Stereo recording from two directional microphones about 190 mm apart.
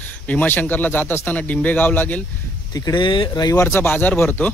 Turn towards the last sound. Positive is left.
turn(degrees=10)  # may be behind; listen again after turning